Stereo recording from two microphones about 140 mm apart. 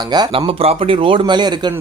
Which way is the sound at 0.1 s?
35° right (ahead or behind).